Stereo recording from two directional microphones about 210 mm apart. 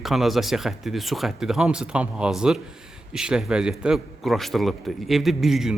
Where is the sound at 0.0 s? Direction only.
Centre (ahead or behind).